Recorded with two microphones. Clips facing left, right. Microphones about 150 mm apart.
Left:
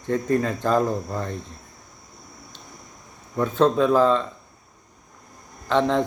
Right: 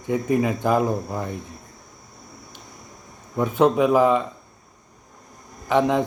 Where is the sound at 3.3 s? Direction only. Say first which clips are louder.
Right 1 dB; 15° right (ahead or behind).